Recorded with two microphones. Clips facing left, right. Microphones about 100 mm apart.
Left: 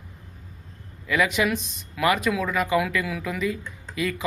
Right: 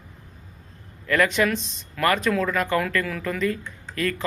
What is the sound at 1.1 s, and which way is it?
A man's voice, 10° left (ahead or behind).